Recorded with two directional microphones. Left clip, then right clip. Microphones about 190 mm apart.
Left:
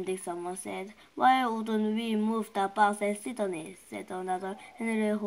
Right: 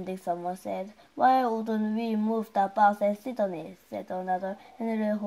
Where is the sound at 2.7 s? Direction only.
60° right (ahead or behind).